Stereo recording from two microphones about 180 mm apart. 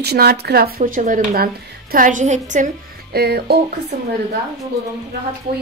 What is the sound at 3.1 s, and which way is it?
Speech, 60° right (ahead or behind).